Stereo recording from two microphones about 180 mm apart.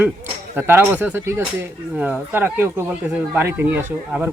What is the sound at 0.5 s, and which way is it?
Speech, 10° right (ahead or behind).